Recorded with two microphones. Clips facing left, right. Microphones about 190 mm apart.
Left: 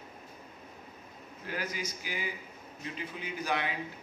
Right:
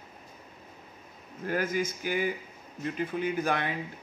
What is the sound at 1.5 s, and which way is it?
A man's voice, 50° right (ahead or behind).